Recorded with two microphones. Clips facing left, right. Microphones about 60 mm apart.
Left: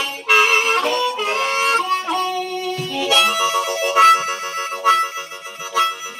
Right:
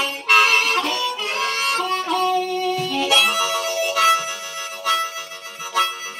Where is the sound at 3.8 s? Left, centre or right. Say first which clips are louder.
Left 6 dB; left.